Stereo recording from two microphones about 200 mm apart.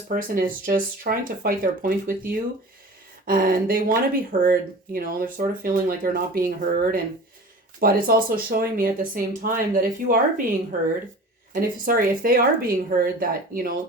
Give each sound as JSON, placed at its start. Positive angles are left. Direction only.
{"t": 0.1, "sound": "speech", "side_deg": -45}
{"t": 3.2, "sound": "speech", "side_deg": -45}
{"t": 11.9, "sound": "speech", "side_deg": -45}